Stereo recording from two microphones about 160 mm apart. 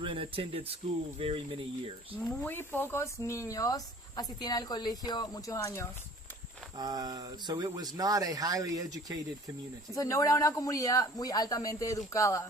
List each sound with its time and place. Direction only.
0.0 s speech: 35° right (ahead or behind)
2.1 s speech: 10° left (ahead or behind)
6.7 s speech: 25° right (ahead or behind)
9.9 s speech: 20° left (ahead or behind)